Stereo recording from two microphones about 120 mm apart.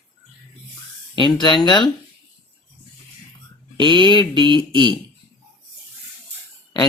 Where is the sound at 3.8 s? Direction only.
40° right (ahead or behind).